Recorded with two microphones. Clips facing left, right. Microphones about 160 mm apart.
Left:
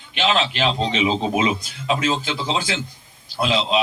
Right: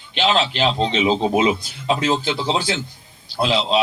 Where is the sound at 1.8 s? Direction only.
30° right (ahead or behind).